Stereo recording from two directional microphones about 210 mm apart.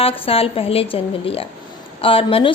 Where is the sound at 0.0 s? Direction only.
25° left (ahead or behind).